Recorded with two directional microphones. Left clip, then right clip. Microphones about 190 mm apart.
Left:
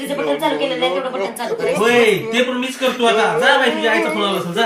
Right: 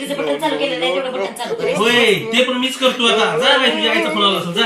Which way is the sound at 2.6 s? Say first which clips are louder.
Right 1 dB; centre (ahead or behind).